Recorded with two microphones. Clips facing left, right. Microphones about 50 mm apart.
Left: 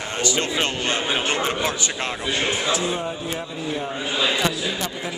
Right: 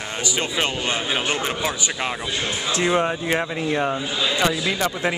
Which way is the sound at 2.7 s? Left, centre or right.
Right.